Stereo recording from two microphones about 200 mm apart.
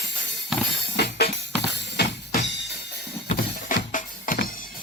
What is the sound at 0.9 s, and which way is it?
Music, 50° left (ahead or behind).